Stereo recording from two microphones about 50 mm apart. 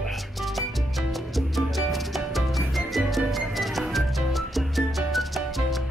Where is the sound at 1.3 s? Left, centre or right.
Centre.